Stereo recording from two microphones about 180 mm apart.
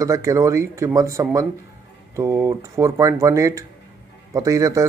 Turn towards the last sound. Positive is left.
turn(degrees=-20)  # may be behind; listen again after turning